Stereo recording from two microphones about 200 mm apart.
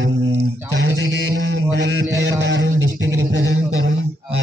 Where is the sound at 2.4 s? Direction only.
65° right (ahead or behind).